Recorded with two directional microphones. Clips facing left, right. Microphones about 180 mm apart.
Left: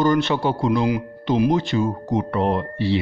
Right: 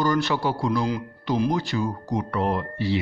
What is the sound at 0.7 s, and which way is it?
Speech, 15° left (ahead or behind).